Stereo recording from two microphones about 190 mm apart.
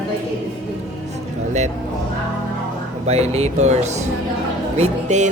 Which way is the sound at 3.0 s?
35° right (ahead or behind).